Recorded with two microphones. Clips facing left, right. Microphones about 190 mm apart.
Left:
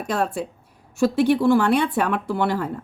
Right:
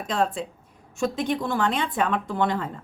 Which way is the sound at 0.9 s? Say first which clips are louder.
Left 7 dB; 10° left (ahead or behind).